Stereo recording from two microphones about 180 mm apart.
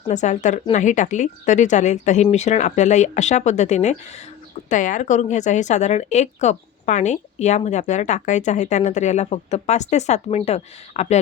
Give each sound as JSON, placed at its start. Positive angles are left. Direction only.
{"t": 0.1, "sound": "a woman's voice", "side_deg": 40}